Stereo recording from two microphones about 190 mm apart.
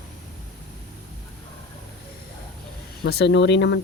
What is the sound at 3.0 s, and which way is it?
Speech, 60° left (ahead or behind).